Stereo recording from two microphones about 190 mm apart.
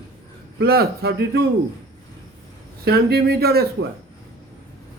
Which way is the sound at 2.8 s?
55° right (ahead or behind).